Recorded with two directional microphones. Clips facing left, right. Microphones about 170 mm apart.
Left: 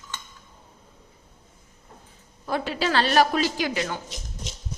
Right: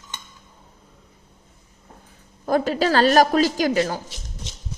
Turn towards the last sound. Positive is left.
turn(degrees=-40)  # may be behind; listen again after turning